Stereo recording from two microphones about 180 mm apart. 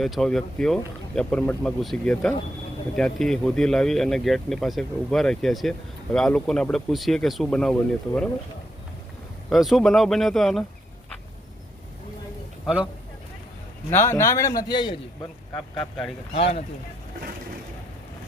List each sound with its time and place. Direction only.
0.0 s speech: centre (ahead or behind)
9.5 s speech: centre (ahead or behind)
13.9 s a man's voice: 15° left (ahead or behind)
15.5 s speech: 5° left (ahead or behind)
16.3 s speech: 35° left (ahead or behind)